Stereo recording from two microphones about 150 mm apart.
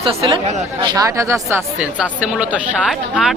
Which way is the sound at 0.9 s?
25° right (ahead or behind).